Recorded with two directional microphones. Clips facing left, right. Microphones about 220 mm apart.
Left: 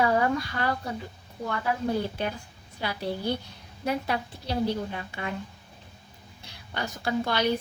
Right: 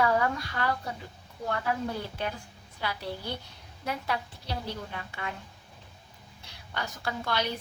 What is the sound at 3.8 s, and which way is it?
A woman's voice, 20° left (ahead or behind).